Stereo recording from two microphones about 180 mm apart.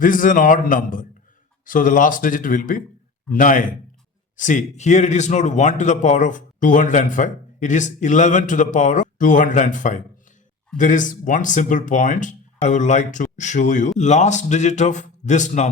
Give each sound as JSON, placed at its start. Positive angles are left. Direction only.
{"t": 0.0, "sound": "a man's voice", "side_deg": 50}